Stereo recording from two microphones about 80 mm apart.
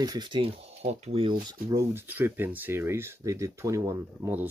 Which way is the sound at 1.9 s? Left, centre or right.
Right.